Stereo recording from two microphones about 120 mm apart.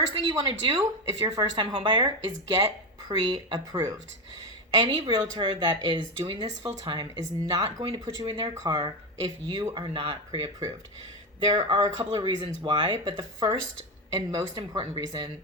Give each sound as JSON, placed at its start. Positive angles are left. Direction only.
{"t": 0.1, "sound": "a woman's voice", "side_deg": -45}